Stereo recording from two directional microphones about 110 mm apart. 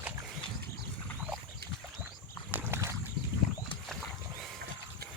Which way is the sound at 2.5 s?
20° right (ahead or behind).